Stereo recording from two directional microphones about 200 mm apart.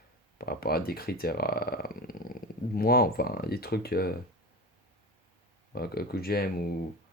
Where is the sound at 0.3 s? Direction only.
50° left (ahead or behind).